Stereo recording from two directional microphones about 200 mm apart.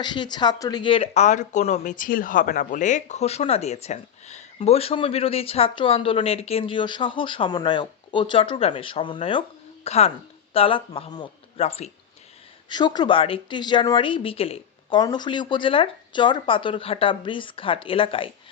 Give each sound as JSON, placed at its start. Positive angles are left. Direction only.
{"t": 0.0, "sound": "speech", "side_deg": 20}